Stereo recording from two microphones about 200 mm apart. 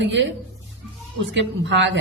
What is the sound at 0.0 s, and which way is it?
Speech, 65° right (ahead or behind).